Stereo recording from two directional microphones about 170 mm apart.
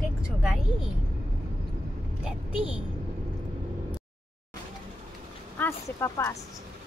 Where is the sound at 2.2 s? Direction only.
5° right (ahead or behind).